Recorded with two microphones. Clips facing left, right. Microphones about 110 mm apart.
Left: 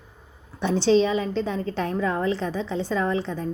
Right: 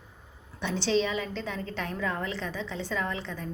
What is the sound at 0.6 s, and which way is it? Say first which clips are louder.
A woman's voice: left 8 dB; 35° left (ahead or behind).